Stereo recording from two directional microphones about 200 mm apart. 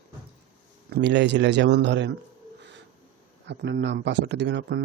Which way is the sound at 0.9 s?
60° right (ahead or behind).